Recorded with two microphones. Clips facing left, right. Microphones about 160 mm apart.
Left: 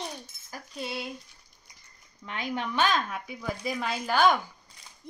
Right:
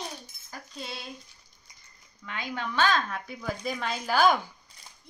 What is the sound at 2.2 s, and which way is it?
Speech, 25° left (ahead or behind).